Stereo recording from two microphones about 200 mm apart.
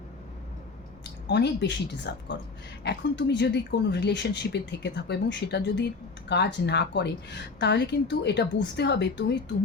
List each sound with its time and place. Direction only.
1.3 s speech: 60° left (ahead or behind)